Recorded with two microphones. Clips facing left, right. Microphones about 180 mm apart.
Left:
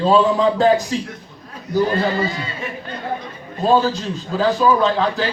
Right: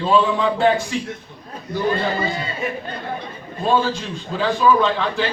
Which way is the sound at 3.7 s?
40° left (ahead or behind).